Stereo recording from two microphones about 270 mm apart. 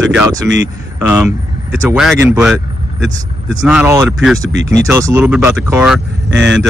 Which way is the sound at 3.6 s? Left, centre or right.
Centre.